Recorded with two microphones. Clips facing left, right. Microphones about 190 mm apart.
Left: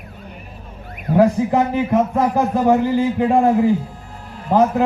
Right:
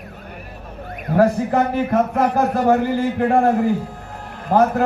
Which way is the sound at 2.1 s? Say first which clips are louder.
Even; 65° right (ahead or behind).